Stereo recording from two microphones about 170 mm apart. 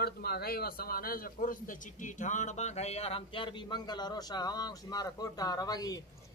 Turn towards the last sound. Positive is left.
turn(degrees=20)  # may be behind; listen again after turning